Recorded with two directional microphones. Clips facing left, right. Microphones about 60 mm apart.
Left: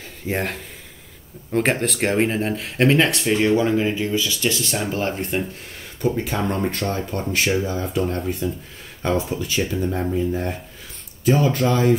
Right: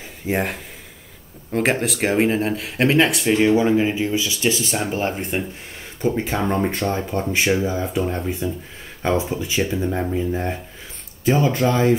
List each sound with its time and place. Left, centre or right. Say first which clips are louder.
0.3 s speech: right 2 dB; centre